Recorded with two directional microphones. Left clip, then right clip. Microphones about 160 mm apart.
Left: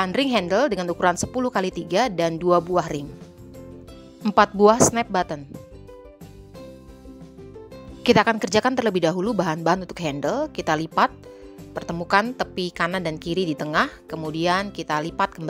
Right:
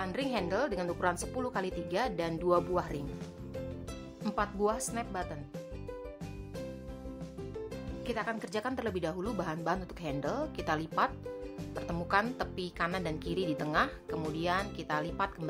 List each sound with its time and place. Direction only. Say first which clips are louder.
0.0 s a woman's voice: left 12 dB; 60° left (ahead or behind)
4.4 s a woman's voice: left 17 dB; 60° left (ahead or behind)
8.0 s a woman's voice: left 18 dB; 70° left (ahead or behind); by 11.1 s 50° left (ahead or behind)
12.1 s a woman's voice: left 11 dB; 50° left (ahead or behind)